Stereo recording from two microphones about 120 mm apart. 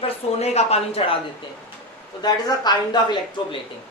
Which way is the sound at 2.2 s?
35° left (ahead or behind).